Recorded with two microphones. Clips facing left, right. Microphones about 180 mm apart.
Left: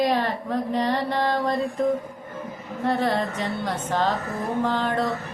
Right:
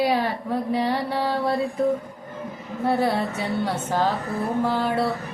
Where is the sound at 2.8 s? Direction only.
10° right (ahead or behind).